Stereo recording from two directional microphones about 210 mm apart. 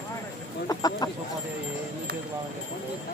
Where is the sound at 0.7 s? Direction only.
20° left (ahead or behind).